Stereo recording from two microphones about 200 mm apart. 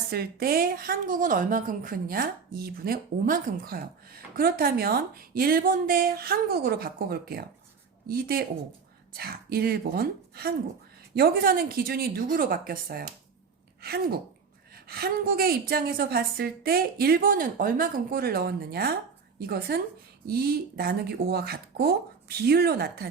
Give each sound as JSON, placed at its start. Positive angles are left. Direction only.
{"t": 0.1, "sound": "a woman's voice", "side_deg": -50}